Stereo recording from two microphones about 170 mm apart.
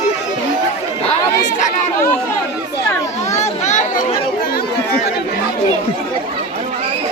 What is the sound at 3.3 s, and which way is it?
Children playing, 45° left (ahead or behind).